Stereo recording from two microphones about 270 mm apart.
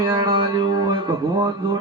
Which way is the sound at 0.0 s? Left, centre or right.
Centre.